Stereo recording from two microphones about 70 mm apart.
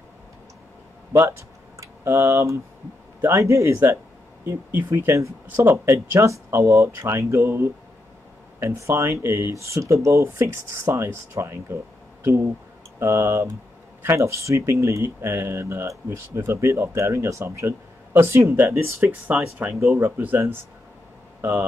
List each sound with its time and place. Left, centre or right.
2.0 s speech: right
4.8 s speech: right
19.2 s speech: right
19.7 s speech: centre
20.0 s speech: right